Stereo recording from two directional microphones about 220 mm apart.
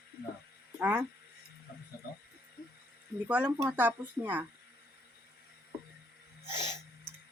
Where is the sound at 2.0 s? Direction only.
45° left (ahead or behind).